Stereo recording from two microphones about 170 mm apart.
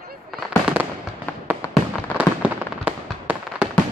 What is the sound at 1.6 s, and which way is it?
Fireworks, 15° left (ahead or behind).